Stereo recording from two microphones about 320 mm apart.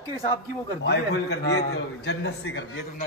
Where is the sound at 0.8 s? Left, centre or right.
Left.